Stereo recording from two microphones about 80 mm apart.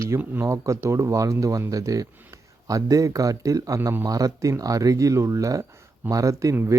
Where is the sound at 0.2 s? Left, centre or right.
Right.